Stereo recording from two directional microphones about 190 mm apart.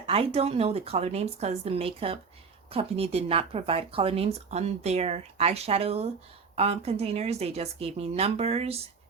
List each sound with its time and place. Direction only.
0.0 s speech: 30° right (ahead or behind)